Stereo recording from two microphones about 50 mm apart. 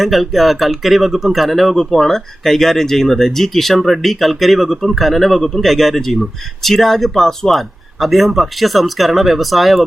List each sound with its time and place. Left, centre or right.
0.0 s speech: centre